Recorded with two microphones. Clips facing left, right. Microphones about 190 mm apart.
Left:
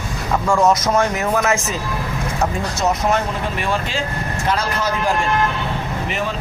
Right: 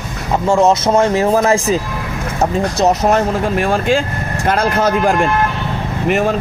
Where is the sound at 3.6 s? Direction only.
50° right (ahead or behind).